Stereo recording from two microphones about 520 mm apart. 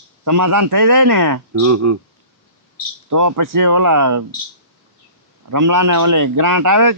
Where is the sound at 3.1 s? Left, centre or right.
Right.